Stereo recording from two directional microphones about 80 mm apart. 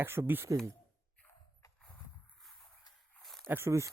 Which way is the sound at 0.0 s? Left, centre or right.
Right.